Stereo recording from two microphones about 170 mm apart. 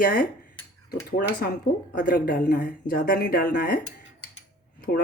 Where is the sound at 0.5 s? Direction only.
20° left (ahead or behind).